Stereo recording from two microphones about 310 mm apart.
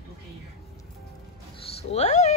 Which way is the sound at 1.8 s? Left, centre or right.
Centre.